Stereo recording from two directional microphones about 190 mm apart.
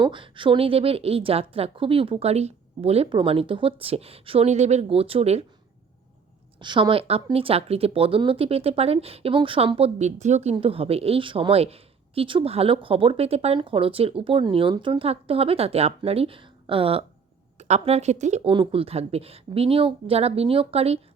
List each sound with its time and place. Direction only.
0.0 s speech: 25° right (ahead or behind)
6.6 s speech: 25° right (ahead or behind)